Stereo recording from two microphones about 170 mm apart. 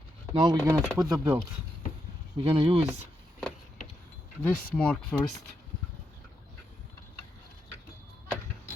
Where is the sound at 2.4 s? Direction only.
30° right (ahead or behind).